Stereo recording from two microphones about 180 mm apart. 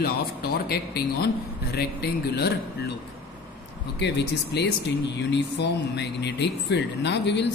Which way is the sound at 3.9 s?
65° left (ahead or behind).